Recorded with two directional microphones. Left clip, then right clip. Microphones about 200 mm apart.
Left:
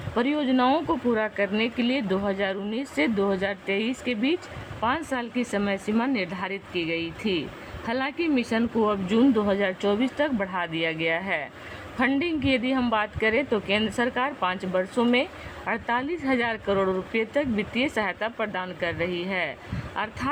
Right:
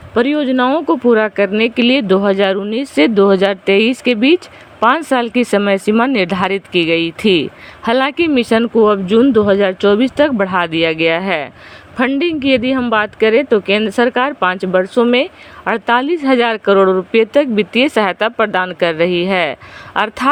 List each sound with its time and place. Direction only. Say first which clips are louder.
0.1 s speech: right 11 dB; 40° right (ahead or behind)
1.1 s speech: right 12 dB; 45° right (ahead or behind)